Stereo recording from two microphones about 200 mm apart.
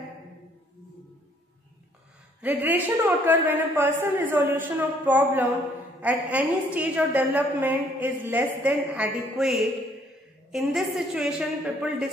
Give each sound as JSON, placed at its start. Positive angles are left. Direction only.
{"t": 2.4, "sound": "a woman's voice", "side_deg": -10}